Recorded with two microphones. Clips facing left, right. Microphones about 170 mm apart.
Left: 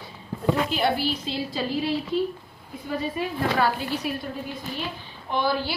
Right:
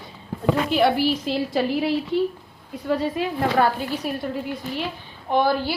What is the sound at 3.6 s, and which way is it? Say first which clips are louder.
Speech: right 3 dB; 50° right (ahead or behind).